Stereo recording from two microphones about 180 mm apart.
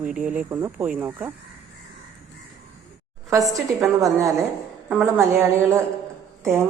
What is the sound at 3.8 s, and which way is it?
Speech, 15° right (ahead or behind).